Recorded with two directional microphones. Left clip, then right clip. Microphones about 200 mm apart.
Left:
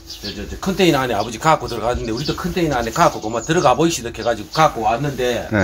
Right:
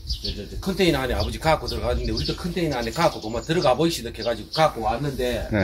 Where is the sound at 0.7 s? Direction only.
40° left (ahead or behind).